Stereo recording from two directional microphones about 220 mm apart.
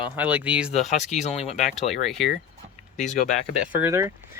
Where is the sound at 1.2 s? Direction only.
30° left (ahead or behind).